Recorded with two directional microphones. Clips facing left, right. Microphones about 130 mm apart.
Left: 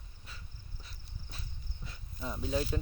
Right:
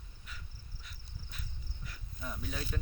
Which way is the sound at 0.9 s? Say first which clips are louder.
Even; 30° left (ahead or behind).